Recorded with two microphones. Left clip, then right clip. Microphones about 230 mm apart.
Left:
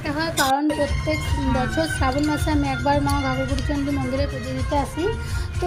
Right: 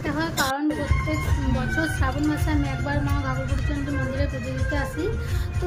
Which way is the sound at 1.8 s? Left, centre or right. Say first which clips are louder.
Left 2 dB; left.